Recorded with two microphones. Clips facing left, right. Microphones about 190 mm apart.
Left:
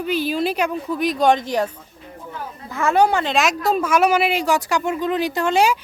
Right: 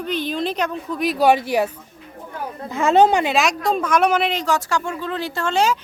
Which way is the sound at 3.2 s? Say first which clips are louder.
Even; centre (ahead or behind).